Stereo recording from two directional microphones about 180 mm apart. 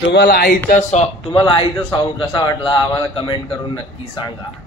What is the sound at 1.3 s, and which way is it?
A man's voice, 25° left (ahead or behind).